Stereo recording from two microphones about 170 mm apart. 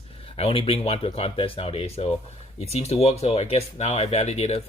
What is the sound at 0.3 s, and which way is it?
Speech, 35° left (ahead or behind).